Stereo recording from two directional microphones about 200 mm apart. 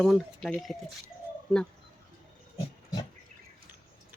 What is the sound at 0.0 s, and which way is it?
Speech, centre (ahead or behind).